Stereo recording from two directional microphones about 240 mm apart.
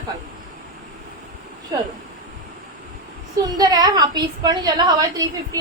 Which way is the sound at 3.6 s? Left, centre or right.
Centre.